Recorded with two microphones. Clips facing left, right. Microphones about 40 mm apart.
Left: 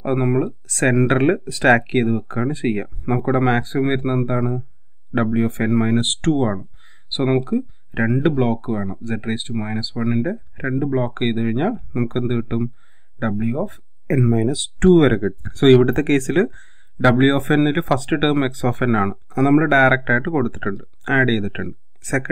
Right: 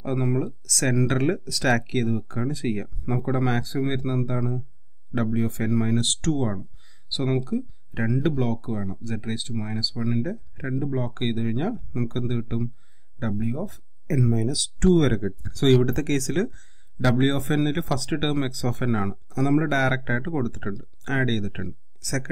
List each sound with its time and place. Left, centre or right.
0.0 s speech: left